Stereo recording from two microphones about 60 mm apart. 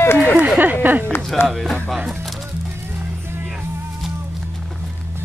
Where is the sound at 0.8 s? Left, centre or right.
Right.